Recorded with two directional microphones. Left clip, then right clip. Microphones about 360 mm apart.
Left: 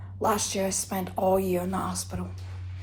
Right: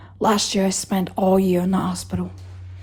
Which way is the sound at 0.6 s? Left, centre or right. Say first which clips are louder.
Right 6 dB; right.